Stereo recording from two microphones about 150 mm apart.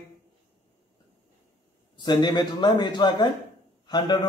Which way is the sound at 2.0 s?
30° left (ahead or behind).